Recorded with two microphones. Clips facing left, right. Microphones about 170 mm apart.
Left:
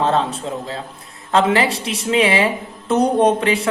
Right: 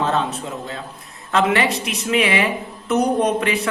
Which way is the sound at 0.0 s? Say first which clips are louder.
Left 3 dB; 30° left (ahead or behind).